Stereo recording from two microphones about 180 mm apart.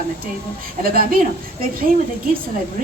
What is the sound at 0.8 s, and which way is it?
Speech, 55° right (ahead or behind).